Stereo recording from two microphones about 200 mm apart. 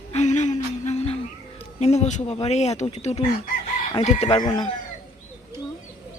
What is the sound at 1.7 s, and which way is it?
Speech, 35° left (ahead or behind).